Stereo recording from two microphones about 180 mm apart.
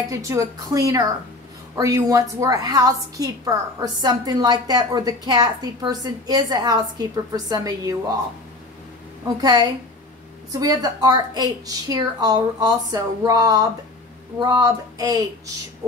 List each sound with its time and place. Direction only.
0.1 s a woman's voice: 15° right (ahead or behind)
9.4 s a woman's voice: 20° right (ahead or behind)